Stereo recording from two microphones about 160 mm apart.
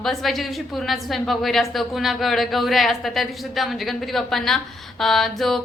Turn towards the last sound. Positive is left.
turn(degrees=0)  # may be behind; listen again after turning